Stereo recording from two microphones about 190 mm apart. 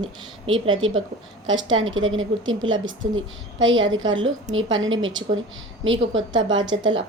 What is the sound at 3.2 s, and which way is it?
A woman's voice, 80° right.